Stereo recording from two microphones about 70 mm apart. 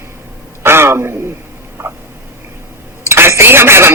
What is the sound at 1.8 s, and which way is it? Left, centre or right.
Frog, right.